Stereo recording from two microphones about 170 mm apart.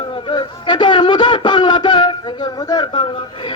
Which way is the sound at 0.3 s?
25° left (ahead or behind).